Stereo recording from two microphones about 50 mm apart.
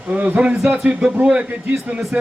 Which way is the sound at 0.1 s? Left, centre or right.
Right.